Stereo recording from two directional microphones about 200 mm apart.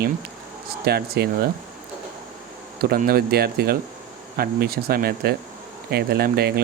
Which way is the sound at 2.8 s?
50° right (ahead or behind).